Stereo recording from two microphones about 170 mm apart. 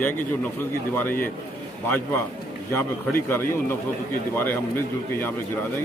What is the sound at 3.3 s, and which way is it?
Speech, 15° left (ahead or behind).